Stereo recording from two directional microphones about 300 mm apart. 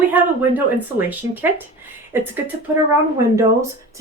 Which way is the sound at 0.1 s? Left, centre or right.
Centre.